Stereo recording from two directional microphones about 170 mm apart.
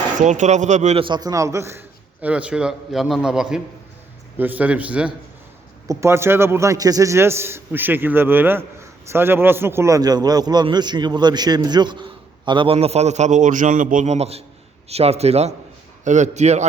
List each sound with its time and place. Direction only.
0.2 s speech: 45° right (ahead or behind)
1.0 s a man's voice: 25° right (ahead or behind); by 16.6 s 40° right (ahead or behind)